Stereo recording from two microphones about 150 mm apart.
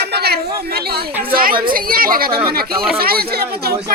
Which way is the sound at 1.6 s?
70° right (ahead or behind).